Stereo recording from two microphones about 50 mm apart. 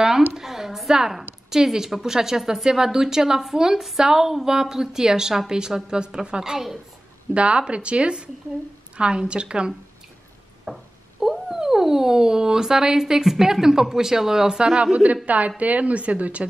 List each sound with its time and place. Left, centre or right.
0.3 s a sound: centre
1.5 s speech: centre
7.3 s a woman's voice: right
10.6 s speech: centre
14.8 s a woman's voice: right